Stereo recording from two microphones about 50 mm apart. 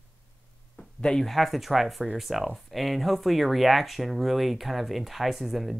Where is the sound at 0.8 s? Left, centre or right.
Centre.